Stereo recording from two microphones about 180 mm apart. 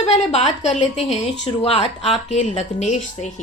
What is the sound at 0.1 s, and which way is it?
A woman's voice, 35° left (ahead or behind).